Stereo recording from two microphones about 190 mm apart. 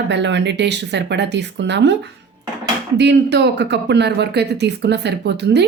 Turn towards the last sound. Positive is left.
turn(degrees=-60)  # may be behind; listen again after turning